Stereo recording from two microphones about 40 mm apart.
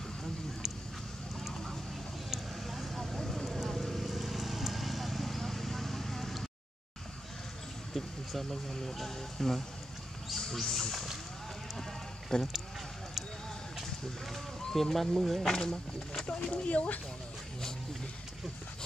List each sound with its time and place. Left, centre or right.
1.4 s vehicle: centre
7.9 s speech: centre
12.3 s speech: centre
14.3 s speech: centre
15.4 s speech: centre
16.3 s speech: left